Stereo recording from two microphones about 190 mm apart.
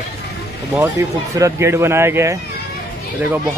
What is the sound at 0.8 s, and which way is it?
Speech, 15° right (ahead or behind).